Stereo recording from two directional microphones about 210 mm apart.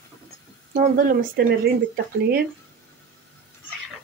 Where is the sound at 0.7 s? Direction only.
40° right (ahead or behind).